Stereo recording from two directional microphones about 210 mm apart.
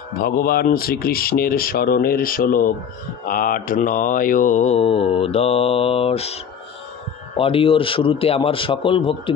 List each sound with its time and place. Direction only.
0.2 s speech: 45° left (ahead or behind)
3.3 s mantra: 40° left (ahead or behind)
7.3 s a man's voice: 25° left (ahead or behind)